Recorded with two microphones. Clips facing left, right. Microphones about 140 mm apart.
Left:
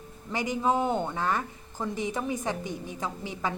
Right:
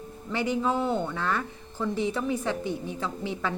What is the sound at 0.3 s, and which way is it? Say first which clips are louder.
Speech: even; 15° left (ahead or behind).